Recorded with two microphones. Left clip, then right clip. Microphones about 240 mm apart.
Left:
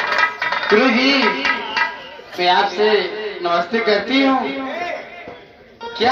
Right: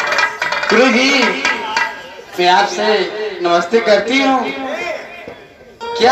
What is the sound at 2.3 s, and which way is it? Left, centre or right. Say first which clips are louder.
Speech: right 3 dB; right.